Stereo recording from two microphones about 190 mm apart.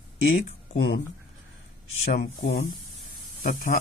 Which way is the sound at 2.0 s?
55° left (ahead or behind).